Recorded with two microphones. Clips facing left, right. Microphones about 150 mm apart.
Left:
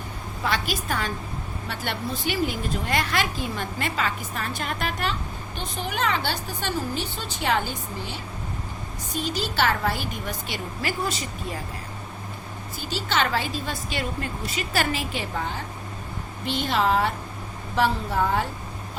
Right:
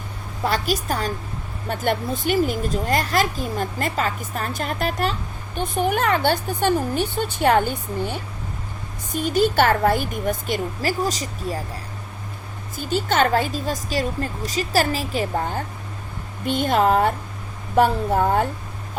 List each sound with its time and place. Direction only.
0.4 s a woman's voice: 40° right (ahead or behind)
5.5 s speech: 55° right (ahead or behind); by 11.6 s 35° right (ahead or behind)
12.7 s speech: 45° right (ahead or behind)